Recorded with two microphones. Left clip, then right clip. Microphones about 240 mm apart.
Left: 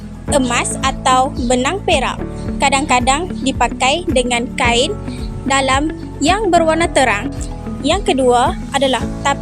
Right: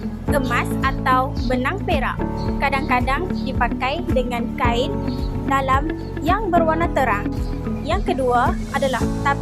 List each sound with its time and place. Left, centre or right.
0.3 s a woman's voice: left